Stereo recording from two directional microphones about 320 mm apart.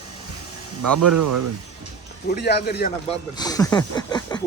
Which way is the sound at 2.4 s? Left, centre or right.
Left.